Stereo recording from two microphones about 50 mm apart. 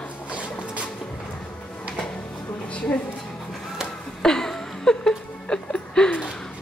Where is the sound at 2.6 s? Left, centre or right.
Left.